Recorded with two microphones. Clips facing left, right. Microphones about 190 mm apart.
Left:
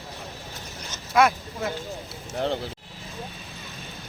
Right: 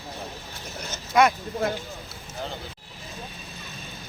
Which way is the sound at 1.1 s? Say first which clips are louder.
Even; centre (ahead or behind).